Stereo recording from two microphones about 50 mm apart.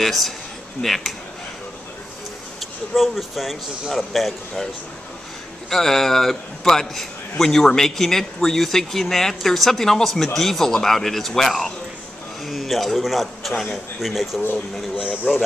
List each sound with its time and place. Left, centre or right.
0.0 s speech: centre
2.6 s speech: centre
5.7 s a man's voice: centre
15.3 s a man's voice: centre